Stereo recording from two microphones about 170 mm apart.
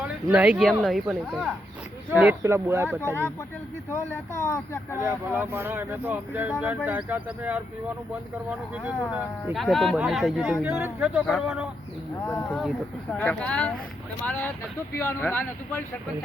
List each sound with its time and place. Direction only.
0.3 s speech: 5° right (ahead or behind)
2.4 s speech: 15° right (ahead or behind)
3.0 s speech: 15° left (ahead or behind)
5.3 s speech: 10° right (ahead or behind)
10.7 s speech: 15° right (ahead or behind)
12.2 s speech: 15° left (ahead or behind)
12.5 s speech: centre (ahead or behind)